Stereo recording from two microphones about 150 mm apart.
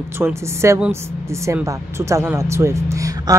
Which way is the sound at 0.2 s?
20° right (ahead or behind).